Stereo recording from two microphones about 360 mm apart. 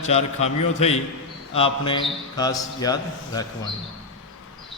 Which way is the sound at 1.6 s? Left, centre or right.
Centre.